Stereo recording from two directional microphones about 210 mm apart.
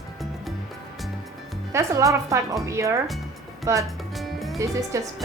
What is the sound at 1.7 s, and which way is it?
A woman's voice, 15° right (ahead or behind).